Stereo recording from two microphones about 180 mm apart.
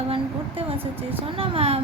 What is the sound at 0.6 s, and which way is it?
Speech, 30° right (ahead or behind).